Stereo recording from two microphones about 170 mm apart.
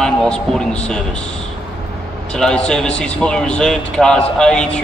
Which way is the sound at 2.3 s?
5° left (ahead or behind).